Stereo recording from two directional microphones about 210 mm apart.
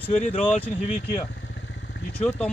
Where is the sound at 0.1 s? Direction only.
30° left (ahead or behind).